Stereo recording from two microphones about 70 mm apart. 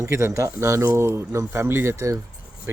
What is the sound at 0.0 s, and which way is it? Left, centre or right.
Speech, right.